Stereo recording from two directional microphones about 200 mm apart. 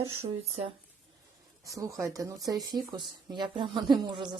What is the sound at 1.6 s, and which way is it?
Speech, 15° right (ahead or behind).